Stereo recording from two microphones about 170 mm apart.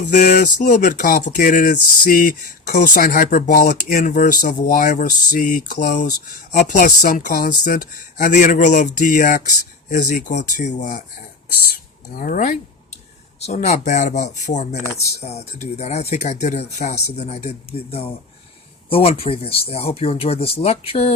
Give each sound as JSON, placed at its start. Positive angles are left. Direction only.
{"t": 0.0, "sound": "speech", "side_deg": 45}
{"t": 11.7, "sound": "mechanisms", "side_deg": 55}
{"t": 13.4, "sound": "speech", "side_deg": 40}